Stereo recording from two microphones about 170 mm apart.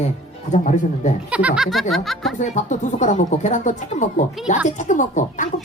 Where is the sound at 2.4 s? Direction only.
45° left (ahead or behind).